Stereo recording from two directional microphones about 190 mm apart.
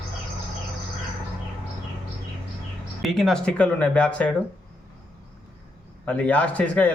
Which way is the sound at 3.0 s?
Centre (ahead or behind).